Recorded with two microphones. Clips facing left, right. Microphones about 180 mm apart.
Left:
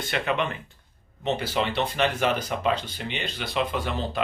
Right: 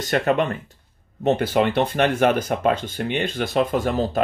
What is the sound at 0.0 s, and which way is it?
Speech, 45° right (ahead or behind).